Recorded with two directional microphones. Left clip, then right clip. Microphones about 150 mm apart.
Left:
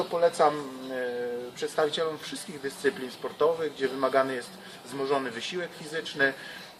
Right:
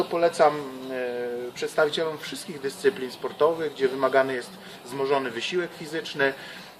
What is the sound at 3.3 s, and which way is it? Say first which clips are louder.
Speech: right 3 dB; 20° right (ahead or behind).